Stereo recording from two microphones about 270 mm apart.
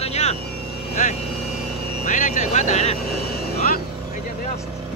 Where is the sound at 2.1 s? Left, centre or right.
Left.